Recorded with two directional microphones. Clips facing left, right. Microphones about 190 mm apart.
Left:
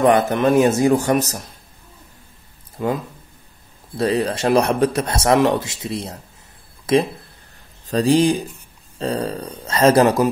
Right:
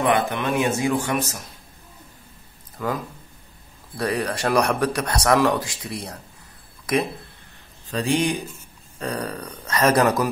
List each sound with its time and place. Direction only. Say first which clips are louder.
0.0 s speech: left 6 dB; 40° left (ahead or behind)
2.8 s speech: left 4 dB; 25° left (ahead or behind)